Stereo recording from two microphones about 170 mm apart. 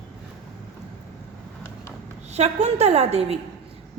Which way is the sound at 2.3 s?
40° right (ahead or behind).